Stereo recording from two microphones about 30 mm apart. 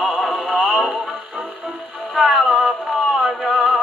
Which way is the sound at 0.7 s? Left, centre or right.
Right.